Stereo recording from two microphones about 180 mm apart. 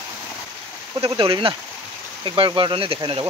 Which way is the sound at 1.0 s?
30° right (ahead or behind).